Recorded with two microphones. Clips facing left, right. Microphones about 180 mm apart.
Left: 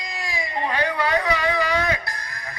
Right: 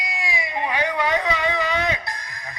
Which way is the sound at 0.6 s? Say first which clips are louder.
Even; 15° right (ahead or behind).